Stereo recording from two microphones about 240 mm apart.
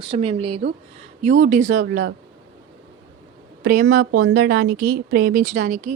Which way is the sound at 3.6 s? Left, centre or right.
Right.